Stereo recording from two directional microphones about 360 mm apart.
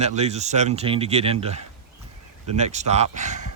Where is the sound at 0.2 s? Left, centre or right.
Centre.